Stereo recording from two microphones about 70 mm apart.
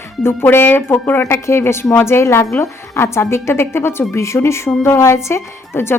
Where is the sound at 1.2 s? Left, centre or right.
Left.